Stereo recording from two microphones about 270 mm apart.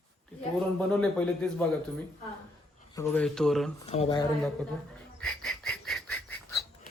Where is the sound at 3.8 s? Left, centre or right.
Left.